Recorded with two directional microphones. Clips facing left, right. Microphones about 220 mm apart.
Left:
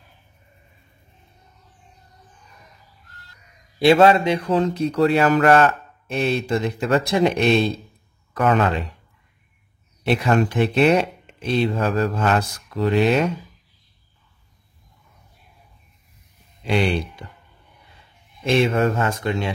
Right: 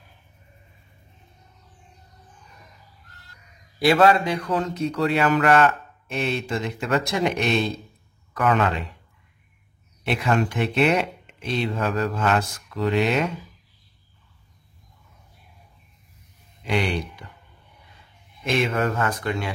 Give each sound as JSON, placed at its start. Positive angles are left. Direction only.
{"t": 3.8, "sound": "a man's voice", "side_deg": 25}
{"t": 10.0, "sound": "speech", "side_deg": 35}
{"t": 16.6, "sound": "speech", "side_deg": 30}
{"t": 18.4, "sound": "speech", "side_deg": 25}